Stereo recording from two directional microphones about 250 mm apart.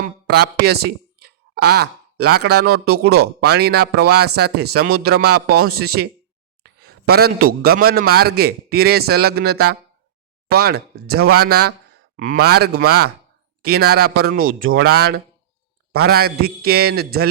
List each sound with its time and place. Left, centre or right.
0.0 s a man's voice: right